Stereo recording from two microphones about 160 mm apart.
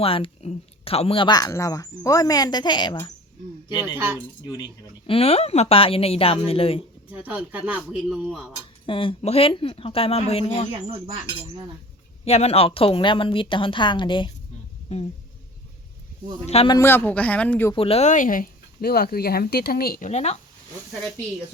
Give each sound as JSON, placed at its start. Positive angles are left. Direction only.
{"t": 0.0, "sound": "speech", "side_deg": 35}
{"t": 3.8, "sound": "speech", "side_deg": -15}
{"t": 4.4, "sound": "speech", "side_deg": 20}
{"t": 5.0, "sound": "a woman's voice", "side_deg": 40}
{"t": 7.1, "sound": "speech", "side_deg": -10}
{"t": 8.9, "sound": "a woman's voice", "side_deg": 35}
{"t": 10.7, "sound": "speech", "side_deg": -40}
{"t": 12.2, "sound": "a woman's voice", "side_deg": 40}
{"t": 14.9, "sound": "speech", "side_deg": 45}
{"t": 16.5, "sound": "a woman's voice", "side_deg": 40}
{"t": 16.7, "sound": "speech", "side_deg": 15}
{"t": 17.7, "sound": "speech", "side_deg": 40}
{"t": 20.1, "sound": "speech", "side_deg": 45}